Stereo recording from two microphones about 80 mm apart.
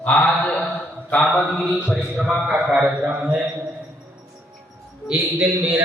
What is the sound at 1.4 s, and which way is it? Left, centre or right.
A man's voice, centre.